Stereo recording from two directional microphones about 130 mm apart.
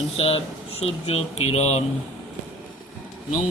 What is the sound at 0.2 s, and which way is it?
Speech, 50° left (ahead or behind).